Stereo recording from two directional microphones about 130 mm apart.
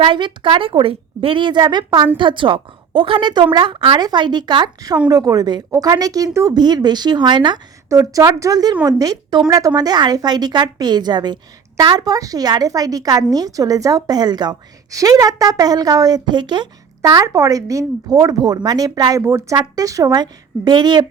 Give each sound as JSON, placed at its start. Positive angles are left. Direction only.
{"t": 0.0, "sound": "a woman's voice", "side_deg": -40}